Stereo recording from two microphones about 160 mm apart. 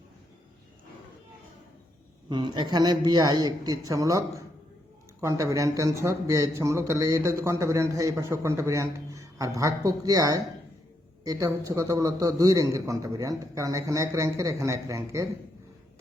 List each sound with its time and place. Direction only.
2.3 s a man's voice: 30° right (ahead or behind)